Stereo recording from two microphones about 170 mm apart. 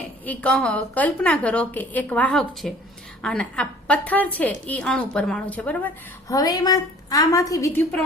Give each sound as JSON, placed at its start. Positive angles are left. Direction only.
{"t": 0.3, "sound": "a woman's voice", "side_deg": 5}
{"t": 6.2, "sound": "a woman's voice", "side_deg": 20}